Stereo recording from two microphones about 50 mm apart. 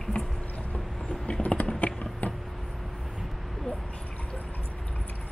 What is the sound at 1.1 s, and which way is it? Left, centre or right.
Typing, left.